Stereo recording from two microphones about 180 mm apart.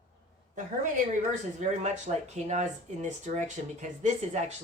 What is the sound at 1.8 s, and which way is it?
Speech, 40° right (ahead or behind).